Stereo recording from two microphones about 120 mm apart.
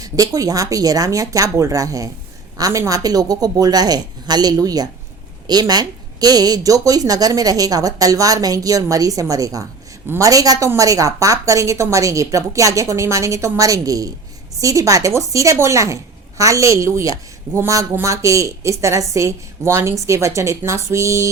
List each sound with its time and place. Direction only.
0.0 s a woman's voice: 30° right (ahead or behind)